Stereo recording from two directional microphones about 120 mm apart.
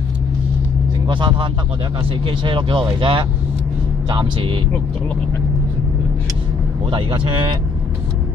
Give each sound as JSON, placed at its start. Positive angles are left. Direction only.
{"t": 1.0, "sound": "speech", "side_deg": -45}
{"t": 6.9, "sound": "speech", "side_deg": -45}